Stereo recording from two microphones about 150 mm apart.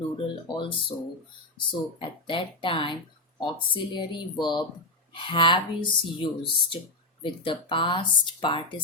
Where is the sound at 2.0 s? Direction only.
35° left (ahead or behind).